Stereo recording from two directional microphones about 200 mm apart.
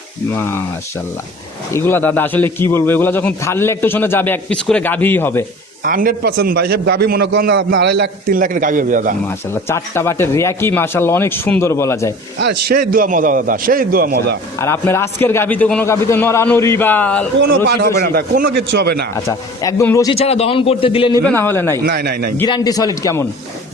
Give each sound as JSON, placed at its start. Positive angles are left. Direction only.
{"t": 0.3, "sound": "a man's voice", "side_deg": 10}
{"t": 1.7, "sound": "a man's voice", "side_deg": 10}
{"t": 5.8, "sound": "a man's voice", "side_deg": -45}
{"t": 9.2, "sound": "a man's voice", "side_deg": 10}
{"t": 12.4, "sound": "a man's voice", "side_deg": -55}
{"t": 14.6, "sound": "a man's voice", "side_deg": 10}
{"t": 17.7, "sound": "a man's voice", "side_deg": -55}
{"t": 19.1, "sound": "a man's voice", "side_deg": 15}
{"t": 20.1, "sound": "a man's voice", "side_deg": 30}
{"t": 21.2, "sound": "a man's voice", "side_deg": 10}
{"t": 21.8, "sound": "a man's voice", "side_deg": -50}
{"t": 22.4, "sound": "a man's voice", "side_deg": 20}